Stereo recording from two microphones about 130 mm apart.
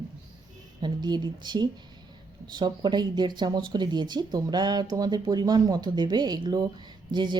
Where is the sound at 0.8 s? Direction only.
35° right (ahead or behind).